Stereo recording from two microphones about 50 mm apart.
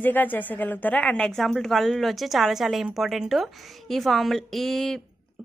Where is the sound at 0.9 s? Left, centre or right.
Left.